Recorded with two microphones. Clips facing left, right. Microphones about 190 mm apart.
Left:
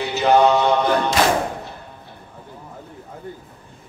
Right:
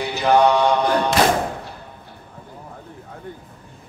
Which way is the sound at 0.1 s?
15° right (ahead or behind).